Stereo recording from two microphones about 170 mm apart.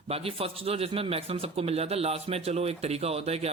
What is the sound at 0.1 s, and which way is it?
A man's voice, 35° right (ahead or behind).